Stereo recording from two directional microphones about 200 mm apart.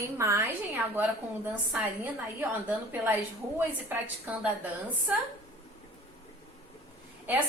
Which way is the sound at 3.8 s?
10° right (ahead or behind).